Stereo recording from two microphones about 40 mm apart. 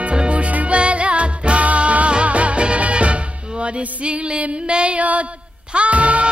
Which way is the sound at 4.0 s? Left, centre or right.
Right.